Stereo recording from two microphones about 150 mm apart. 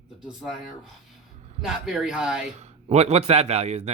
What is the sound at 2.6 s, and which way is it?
A man's voice, 45° right (ahead or behind).